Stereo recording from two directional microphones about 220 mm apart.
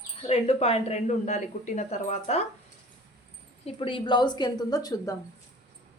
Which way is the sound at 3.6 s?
25° left (ahead or behind).